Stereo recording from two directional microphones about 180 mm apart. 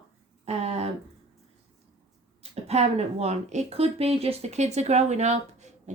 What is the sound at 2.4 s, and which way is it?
A woman's voice, 35° right (ahead or behind).